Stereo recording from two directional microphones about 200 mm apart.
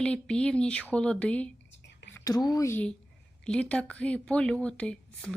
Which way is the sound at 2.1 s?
15° left (ahead or behind).